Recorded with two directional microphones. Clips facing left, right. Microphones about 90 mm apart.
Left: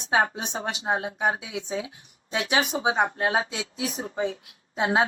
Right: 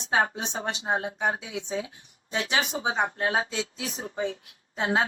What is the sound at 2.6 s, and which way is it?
Speech, 35° left (ahead or behind).